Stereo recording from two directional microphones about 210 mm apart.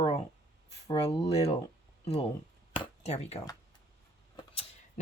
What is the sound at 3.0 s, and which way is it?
Speech, 30° left (ahead or behind).